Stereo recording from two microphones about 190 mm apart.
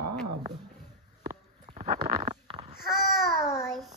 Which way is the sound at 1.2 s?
40° right (ahead or behind).